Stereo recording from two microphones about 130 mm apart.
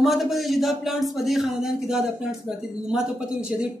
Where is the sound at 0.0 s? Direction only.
Centre (ahead or behind).